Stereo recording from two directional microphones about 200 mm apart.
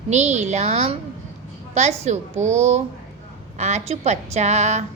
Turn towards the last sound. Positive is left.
turn(degrees=-35)  # may be behind; listen again after turning